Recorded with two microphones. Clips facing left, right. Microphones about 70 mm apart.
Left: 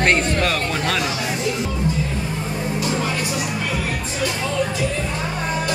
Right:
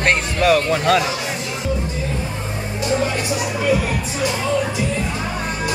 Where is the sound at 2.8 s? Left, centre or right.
Right.